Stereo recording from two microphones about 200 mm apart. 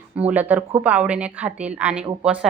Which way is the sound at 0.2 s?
5° right (ahead or behind).